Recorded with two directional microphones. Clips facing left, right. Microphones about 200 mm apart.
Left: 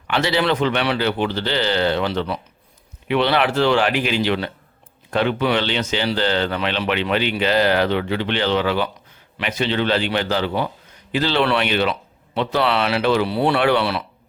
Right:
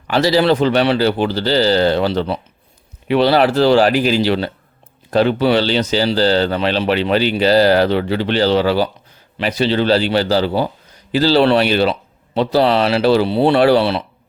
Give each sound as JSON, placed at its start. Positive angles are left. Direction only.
{"t": 0.1, "sound": "a man's voice", "side_deg": -35}